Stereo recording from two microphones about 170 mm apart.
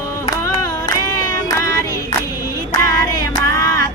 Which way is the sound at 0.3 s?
15° left (ahead or behind).